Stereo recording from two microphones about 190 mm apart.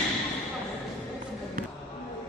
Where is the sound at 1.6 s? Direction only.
50° right (ahead or behind).